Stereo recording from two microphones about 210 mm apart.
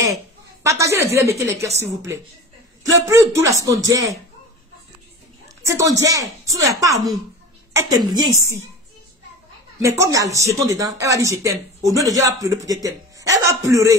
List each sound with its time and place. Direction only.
0.7 s speech: 15° right (ahead or behind)
5.7 s speech: 15° right (ahead or behind)
9.8 s speech: 15° right (ahead or behind)